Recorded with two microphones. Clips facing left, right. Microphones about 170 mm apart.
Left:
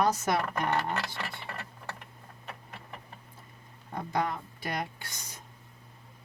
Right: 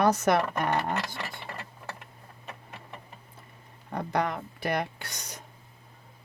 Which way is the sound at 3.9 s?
65° right (ahead or behind).